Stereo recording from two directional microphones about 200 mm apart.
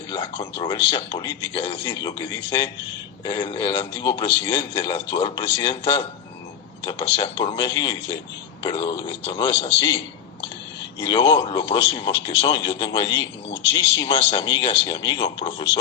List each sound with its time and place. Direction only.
0.1 s speech: 25° left (ahead or behind)
1.8 s speech: 15° left (ahead or behind)
11.0 s speech: 25° left (ahead or behind)